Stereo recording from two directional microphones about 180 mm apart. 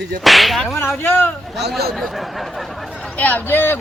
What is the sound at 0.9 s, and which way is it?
Speech, 10° left (ahead or behind).